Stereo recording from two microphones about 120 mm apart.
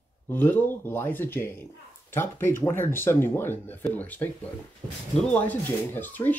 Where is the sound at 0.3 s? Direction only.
15° left (ahead or behind).